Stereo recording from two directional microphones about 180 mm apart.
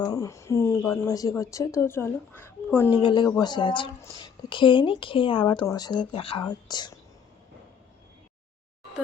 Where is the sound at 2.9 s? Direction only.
25° left (ahead or behind).